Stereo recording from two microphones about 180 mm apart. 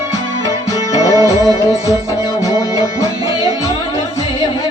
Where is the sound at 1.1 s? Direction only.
20° right (ahead or behind).